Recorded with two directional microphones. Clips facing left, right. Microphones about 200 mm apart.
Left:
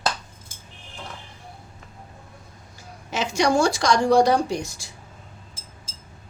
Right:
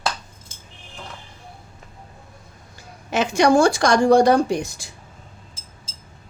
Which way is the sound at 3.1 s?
60° right (ahead or behind).